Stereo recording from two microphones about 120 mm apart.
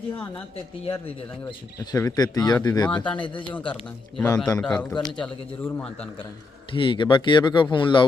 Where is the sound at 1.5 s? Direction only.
35° left (ahead or behind).